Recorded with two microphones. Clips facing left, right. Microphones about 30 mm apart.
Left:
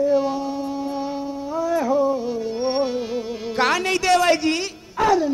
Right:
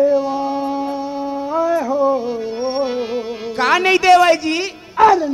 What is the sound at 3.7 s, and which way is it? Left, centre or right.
Speech, right.